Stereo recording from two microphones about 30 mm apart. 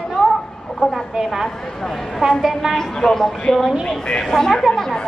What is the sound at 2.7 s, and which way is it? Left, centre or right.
A woman's voice, centre.